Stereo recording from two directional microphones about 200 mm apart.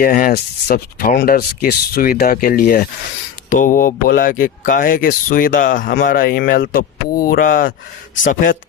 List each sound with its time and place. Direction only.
0.0 s speech: 45° left (ahead or behind)